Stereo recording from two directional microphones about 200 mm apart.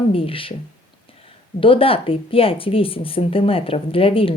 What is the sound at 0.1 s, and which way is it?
Speech, 25° left (ahead or behind).